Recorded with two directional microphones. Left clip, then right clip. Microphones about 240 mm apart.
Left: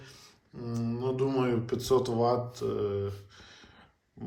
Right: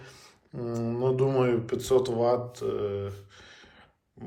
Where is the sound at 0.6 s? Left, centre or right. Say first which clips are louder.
Right 5 dB; centre.